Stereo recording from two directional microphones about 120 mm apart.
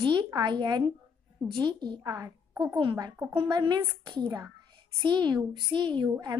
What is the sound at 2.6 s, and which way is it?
Speech, 40° right (ahead or behind).